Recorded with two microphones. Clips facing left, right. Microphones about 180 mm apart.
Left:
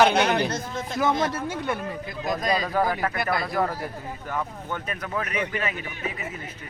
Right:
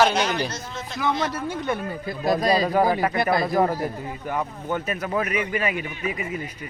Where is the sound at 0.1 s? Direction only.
60° left (ahead or behind).